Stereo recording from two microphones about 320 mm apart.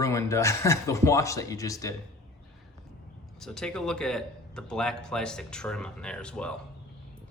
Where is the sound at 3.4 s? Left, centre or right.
Centre.